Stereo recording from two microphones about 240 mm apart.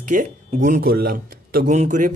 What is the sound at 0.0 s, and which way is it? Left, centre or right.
Speech, right.